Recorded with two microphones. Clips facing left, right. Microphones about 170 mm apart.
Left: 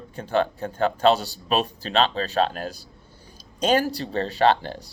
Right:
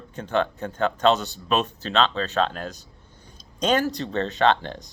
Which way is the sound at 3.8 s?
10° left (ahead or behind).